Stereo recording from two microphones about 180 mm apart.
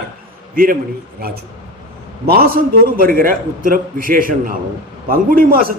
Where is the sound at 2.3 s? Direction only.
55° right (ahead or behind).